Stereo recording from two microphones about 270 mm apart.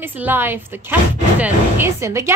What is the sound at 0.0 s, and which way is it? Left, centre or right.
Speech, centre.